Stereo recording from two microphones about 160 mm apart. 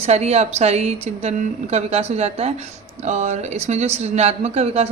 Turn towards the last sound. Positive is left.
turn(degrees=-40)  # may be behind; listen again after turning